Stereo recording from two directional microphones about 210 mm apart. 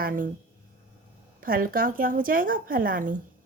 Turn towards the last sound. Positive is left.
turn(degrees=-40)  # may be behind; listen again after turning